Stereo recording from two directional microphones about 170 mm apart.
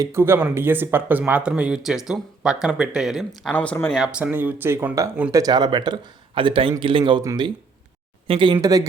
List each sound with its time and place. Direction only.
0.0 s speech: 15° right (ahead or behind); by 4.0 s 5° left (ahead or behind)
4.0 s speech: 10° right (ahead or behind)
5.3 s a man's voice: 20° right (ahead or behind)